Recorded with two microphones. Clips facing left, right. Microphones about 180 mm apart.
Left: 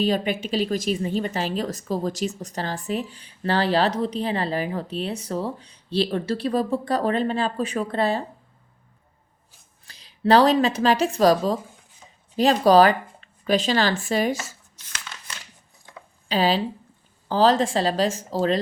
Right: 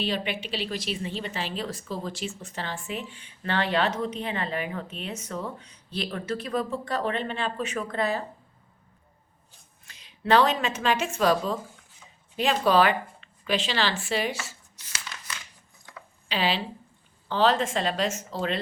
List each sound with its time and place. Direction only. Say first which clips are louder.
0.0 s speech: left 7 dB; 45° left (ahead or behind)
9.8 s a woman's voice: left 8 dB; 35° left (ahead or behind)
16.3 s speech: left 6 dB; 40° left (ahead or behind)